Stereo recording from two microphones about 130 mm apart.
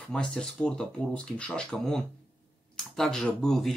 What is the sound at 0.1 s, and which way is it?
Speech, 5° left (ahead or behind).